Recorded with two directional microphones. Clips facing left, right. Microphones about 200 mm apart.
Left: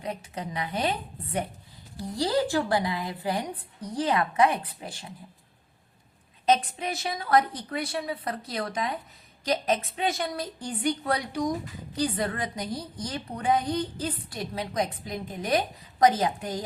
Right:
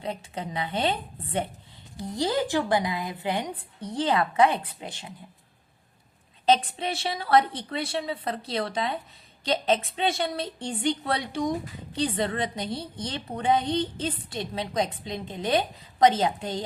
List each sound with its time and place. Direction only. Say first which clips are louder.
0.0 s a woman's voice: right 1 dB; 30° right (ahead or behind)
6.4 s a woman's voice: right 1 dB; 30° right (ahead or behind)